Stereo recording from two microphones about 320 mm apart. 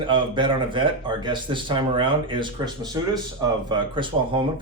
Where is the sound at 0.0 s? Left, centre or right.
Centre.